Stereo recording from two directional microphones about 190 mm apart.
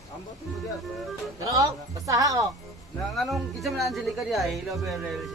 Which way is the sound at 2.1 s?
15° right (ahead or behind).